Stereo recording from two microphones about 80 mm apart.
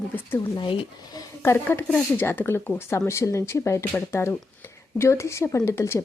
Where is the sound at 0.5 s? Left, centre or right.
Left.